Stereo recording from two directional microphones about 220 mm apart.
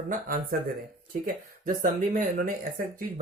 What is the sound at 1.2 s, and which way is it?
Speech, 40° right (ahead or behind).